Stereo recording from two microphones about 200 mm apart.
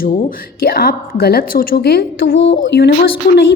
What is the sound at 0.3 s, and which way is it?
A woman's voice, 50° left (ahead or behind).